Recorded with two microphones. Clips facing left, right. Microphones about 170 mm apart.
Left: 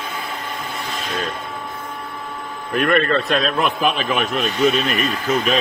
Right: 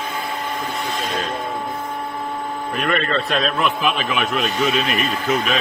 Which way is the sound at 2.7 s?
50° left (ahead or behind).